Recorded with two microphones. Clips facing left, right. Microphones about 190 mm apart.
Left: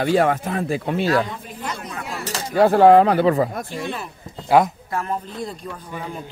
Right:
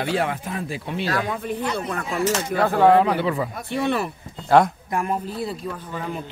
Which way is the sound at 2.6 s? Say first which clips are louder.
Left 5 dB; 40° left (ahead or behind).